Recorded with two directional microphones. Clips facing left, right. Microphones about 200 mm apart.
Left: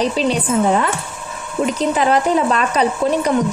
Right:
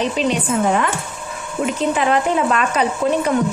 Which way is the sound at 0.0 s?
35° left (ahead or behind).